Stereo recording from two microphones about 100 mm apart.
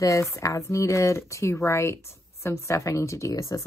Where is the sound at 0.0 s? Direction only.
30° left (ahead or behind).